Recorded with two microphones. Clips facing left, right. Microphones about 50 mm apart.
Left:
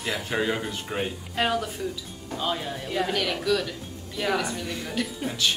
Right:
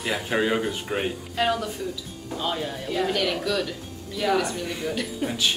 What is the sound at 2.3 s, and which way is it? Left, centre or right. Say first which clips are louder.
A woman's voice: right 1 dB; centre.